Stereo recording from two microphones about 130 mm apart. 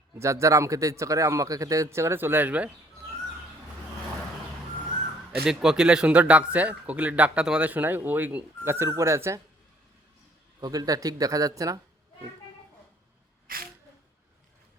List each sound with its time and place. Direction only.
0.2 s speech: 20° right (ahead or behind)
5.5 s speech: 5° right (ahead or behind); by 9.4 s 20° right (ahead or behind)
10.6 s speech: 30° right (ahead or behind)
13.5 s speech: 90° right